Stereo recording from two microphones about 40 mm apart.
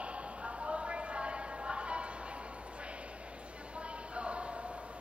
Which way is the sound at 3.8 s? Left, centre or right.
Right.